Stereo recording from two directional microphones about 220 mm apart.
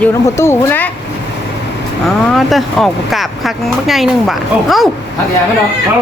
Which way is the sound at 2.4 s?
Centre (ahead or behind).